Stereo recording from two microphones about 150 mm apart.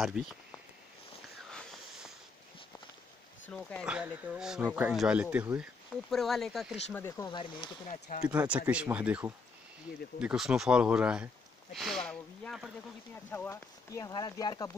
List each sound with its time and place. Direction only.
0.0 s speech: 5° right (ahead or behind)
1.5 s a sound: 5° left (ahead or behind)
3.4 s speech: 5° left (ahead or behind)
3.8 s speech: 5° right (ahead or behind)
7.0 s speech: 20° left (ahead or behind)
7.2 s speech: 30° left (ahead or behind)
7.9 s speech: 60° left (ahead or behind)
8.3 s speech: 10° right (ahead or behind)
13.1 s speech: 15° left (ahead or behind)